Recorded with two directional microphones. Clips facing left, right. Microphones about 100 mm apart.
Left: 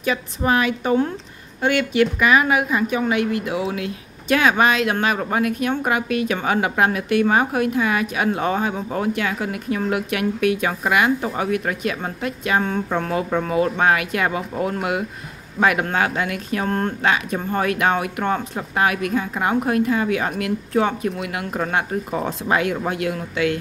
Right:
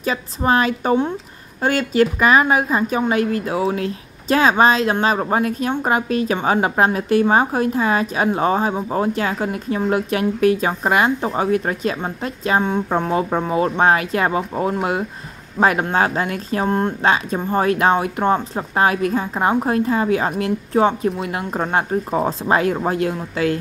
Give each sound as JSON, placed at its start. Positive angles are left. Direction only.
{"t": 0.0, "sound": "a woman's voice", "side_deg": -35}
{"t": 16.6, "sound": "speech", "side_deg": -15}
{"t": 17.0, "sound": "a woman's voice", "side_deg": -30}